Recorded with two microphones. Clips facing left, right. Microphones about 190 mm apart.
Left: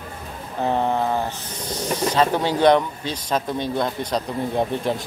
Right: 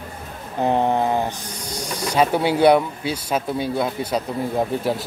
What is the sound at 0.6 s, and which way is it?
Speech, 15° right (ahead or behind).